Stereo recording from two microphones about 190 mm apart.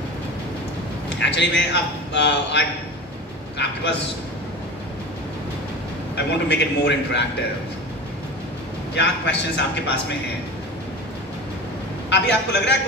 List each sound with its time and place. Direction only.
1.2 s a man's voice: 70° left (ahead or behind)
6.1 s a man's voice: 65° left (ahead or behind)
8.9 s a man's voice: 65° left (ahead or behind)
12.1 s a man's voice: 65° left (ahead or behind)